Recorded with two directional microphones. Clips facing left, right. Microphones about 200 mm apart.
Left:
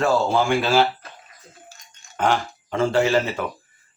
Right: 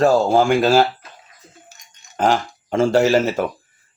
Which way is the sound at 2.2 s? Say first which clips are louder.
Right 3 dB; 40° right (ahead or behind).